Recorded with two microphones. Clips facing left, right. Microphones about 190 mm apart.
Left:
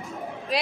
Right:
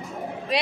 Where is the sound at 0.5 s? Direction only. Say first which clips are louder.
Right 2 dB; centre (ahead or behind).